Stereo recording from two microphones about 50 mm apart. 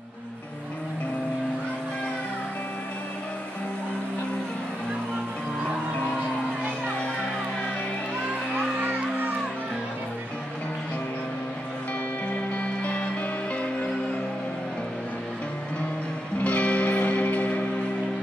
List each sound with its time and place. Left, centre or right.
8.5 s music: right
12.3 s music: left
16.4 s music: left